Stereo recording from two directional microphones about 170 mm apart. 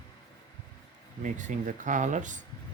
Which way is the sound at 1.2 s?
45° right (ahead or behind).